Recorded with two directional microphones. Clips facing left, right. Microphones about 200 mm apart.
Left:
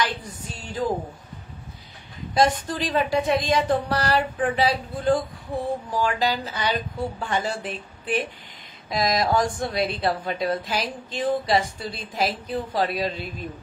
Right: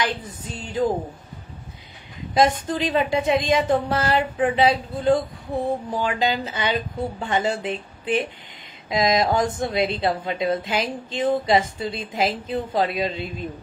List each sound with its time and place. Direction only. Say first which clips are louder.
0.2 s a woman's voice: right 3 dB; 20° right (ahead or behind)
2.4 s a woman's voice: right 2 dB; 20° right (ahead or behind)